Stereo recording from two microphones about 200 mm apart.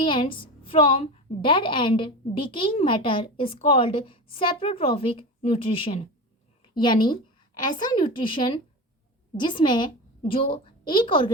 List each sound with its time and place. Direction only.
0.0 s a woman's voice: 25° left (ahead or behind)